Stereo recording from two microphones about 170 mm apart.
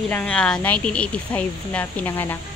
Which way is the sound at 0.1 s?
5° left (ahead or behind).